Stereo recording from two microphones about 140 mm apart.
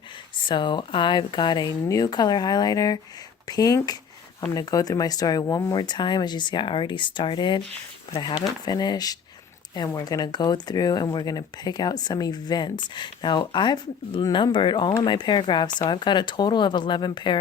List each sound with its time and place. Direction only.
0.4 s speech: 35° left (ahead or behind)